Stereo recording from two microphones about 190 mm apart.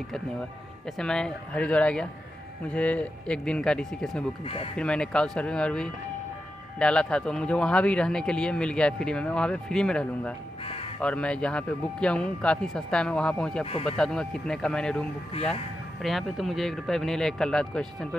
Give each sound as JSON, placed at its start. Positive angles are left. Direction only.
{"t": 0.1, "sound": "speech", "side_deg": 0}
{"t": 10.6, "sound": "crow", "side_deg": 30}
{"t": 11.0, "sound": "speech", "side_deg": 5}